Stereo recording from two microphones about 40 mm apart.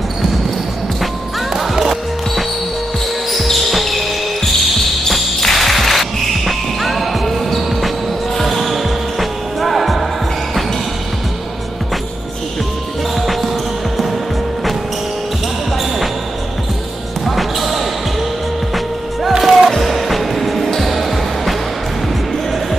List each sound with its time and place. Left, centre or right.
1.6 s music: centre
3.3 s basketball bounce: centre
4.5 s music: centre
17.2 s basketball bounce: centre
19.2 s music: centre